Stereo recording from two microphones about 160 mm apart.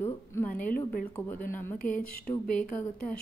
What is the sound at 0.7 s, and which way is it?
Speech, 65° left (ahead or behind).